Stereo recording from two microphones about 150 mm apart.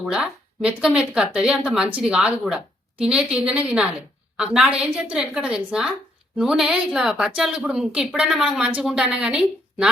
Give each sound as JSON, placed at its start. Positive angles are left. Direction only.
{"t": 0.0, "sound": "a woman's voice", "side_deg": -5}